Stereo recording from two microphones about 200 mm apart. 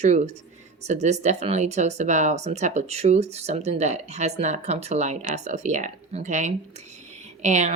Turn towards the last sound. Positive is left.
turn(degrees=-35)  # may be behind; listen again after turning